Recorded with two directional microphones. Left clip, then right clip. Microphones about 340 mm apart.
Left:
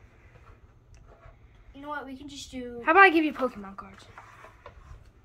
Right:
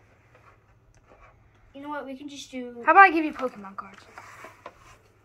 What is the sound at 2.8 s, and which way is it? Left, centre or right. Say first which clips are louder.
A woman's voice: right 3 dB; centre.